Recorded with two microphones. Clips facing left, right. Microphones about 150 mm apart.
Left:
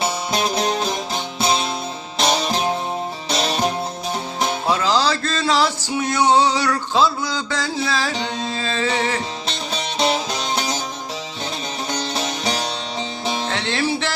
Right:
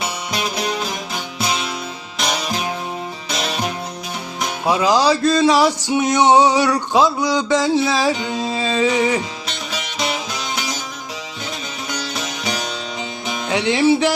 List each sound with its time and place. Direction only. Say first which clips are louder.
0.0 s music: left 3 dB; 30° left (ahead or behind)
4.7 s a sound: right 5 dB; 15° right (ahead or behind)
9.5 s music: left 2 dB; 30° left (ahead or behind)
11.9 s music: left 2 dB; 30° left (ahead or behind)
13.5 s music: right 11 dB; 15° right (ahead or behind)